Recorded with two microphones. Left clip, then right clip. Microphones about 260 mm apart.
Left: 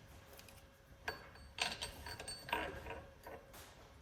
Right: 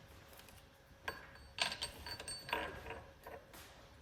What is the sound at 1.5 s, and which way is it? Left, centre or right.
Mechanisms, centre.